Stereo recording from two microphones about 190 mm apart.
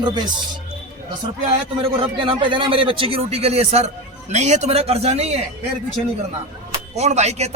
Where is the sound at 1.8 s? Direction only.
30° right (ahead or behind).